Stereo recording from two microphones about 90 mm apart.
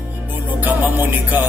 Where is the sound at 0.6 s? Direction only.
20° right (ahead or behind).